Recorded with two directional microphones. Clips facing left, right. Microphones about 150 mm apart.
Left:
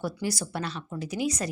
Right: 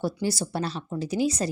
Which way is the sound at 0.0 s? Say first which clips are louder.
Right 3 dB; 30° right (ahead or behind).